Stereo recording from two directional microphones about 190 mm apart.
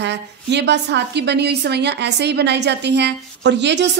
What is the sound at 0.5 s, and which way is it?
A woman's voice, 65° right (ahead or behind).